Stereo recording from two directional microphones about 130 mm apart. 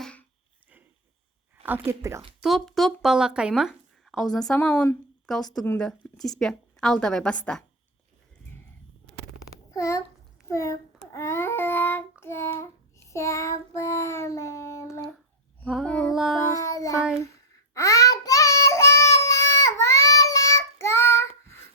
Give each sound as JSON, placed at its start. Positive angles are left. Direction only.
{"t": 0.0, "sound": "a sound", "side_deg": 10}
{"t": 1.6, "sound": "speech", "side_deg": -15}
{"t": 2.4, "sound": "speech", "side_deg": 0}
{"t": 4.7, "sound": "speech", "side_deg": 15}
{"t": 5.2, "sound": "speech", "side_deg": 0}
{"t": 9.7, "sound": "a child's voice", "side_deg": 25}
{"t": 10.5, "sound": "child singing", "side_deg": 25}
{"t": 15.6, "sound": "female singing", "side_deg": 5}
{"t": 16.1, "sound": "child singing", "side_deg": 0}
{"t": 16.5, "sound": "a sound", "side_deg": 25}
{"t": 17.7, "sound": "child singing", "side_deg": 25}